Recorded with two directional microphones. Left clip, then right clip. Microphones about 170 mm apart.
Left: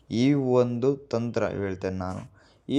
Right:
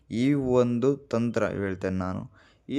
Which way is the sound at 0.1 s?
15° right (ahead or behind).